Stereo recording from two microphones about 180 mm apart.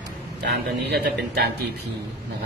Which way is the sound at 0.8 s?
65° right (ahead or behind).